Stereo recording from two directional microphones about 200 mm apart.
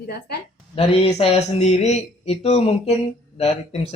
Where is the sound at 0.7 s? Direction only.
30° left (ahead or behind).